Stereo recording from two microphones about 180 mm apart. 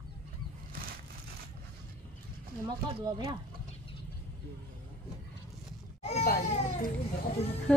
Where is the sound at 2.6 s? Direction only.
20° right (ahead or behind).